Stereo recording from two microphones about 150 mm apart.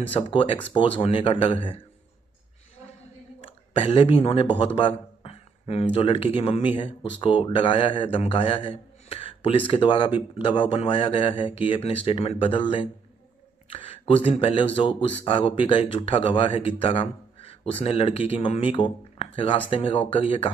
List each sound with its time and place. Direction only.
0.1 s speech: 35° left (ahead or behind)
3.3 s a woman's voice: 40° left (ahead or behind)
4.7 s a sound: 40° left (ahead or behind)
5.9 s speech: 35° left (ahead or behind)